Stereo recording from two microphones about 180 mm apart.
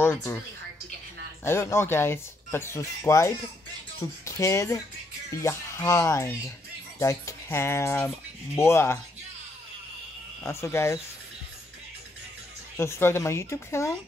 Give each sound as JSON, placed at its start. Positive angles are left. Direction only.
{"t": 0.0, "sound": "a woman's voice", "side_deg": 15}
{"t": 1.4, "sound": "speech", "side_deg": 15}
{"t": 10.4, "sound": "speech", "side_deg": 15}
{"t": 12.7, "sound": "speech", "side_deg": 15}